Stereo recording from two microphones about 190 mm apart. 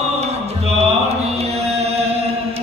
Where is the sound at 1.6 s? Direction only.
35° right (ahead or behind).